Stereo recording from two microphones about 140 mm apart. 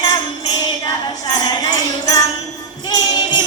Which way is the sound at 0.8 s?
30° left (ahead or behind).